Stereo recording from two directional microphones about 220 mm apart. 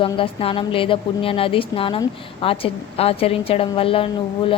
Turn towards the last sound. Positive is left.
turn(degrees=25)  # may be behind; listen again after turning